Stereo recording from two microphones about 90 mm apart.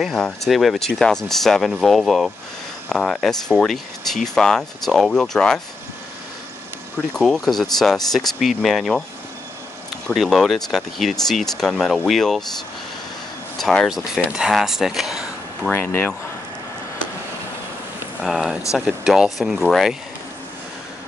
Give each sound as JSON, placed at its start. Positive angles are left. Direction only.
{"t": 0.1, "sound": "speech", "side_deg": 5}
{"t": 7.2, "sound": "speech", "side_deg": 5}
{"t": 10.1, "sound": "speech", "side_deg": 0}
{"t": 13.6, "sound": "speech", "side_deg": 5}
{"t": 15.7, "sound": "speech", "side_deg": 25}
{"t": 18.2, "sound": "speech", "side_deg": 0}